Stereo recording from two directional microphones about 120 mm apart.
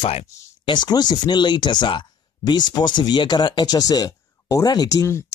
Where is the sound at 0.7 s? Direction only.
35° left (ahead or behind).